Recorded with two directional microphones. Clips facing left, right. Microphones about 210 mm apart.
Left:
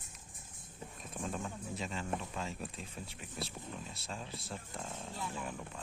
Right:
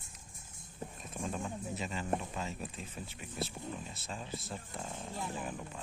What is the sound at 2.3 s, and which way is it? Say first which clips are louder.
Speech: right 1 dB; centre (ahead or behind).